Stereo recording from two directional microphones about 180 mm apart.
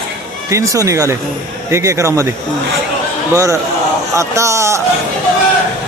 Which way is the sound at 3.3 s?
15° right (ahead or behind).